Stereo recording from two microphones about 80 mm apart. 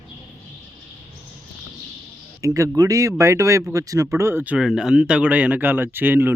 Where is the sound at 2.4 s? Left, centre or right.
Right.